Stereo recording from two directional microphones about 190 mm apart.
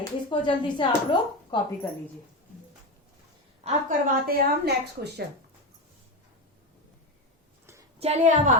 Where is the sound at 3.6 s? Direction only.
45° right (ahead or behind).